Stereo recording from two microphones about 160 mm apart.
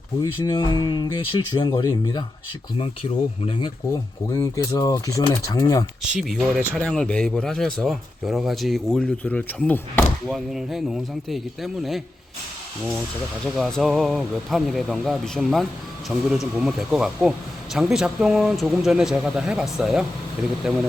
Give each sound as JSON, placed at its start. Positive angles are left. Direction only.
{"t": 0.4, "sound": "speech", "side_deg": 25}
{"t": 2.7, "sound": "speech", "side_deg": 35}
{"t": 4.3, "sound": "speech", "side_deg": 20}
{"t": 6.0, "sound": "speech", "side_deg": 0}
{"t": 10.2, "sound": "speech", "side_deg": 0}
{"t": 13.4, "sound": "speech", "side_deg": 0}